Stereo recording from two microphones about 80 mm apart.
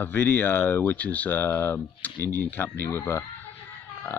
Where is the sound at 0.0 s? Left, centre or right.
Left.